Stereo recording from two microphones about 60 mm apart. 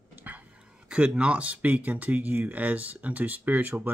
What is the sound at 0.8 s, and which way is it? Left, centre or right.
Speech, centre.